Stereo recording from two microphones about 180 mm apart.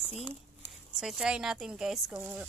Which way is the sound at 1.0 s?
5° right (ahead or behind).